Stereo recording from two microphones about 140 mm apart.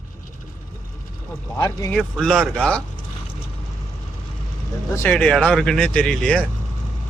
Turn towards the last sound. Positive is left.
turn(degrees=5)  # may be behind; listen again after turning